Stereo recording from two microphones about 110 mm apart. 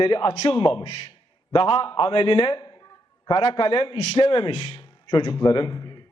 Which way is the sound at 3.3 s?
55° left (ahead or behind).